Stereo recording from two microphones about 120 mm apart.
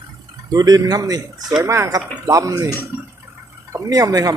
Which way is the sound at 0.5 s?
30° right (ahead or behind).